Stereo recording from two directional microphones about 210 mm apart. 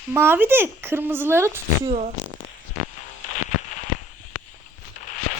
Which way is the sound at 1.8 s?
30° right (ahead or behind).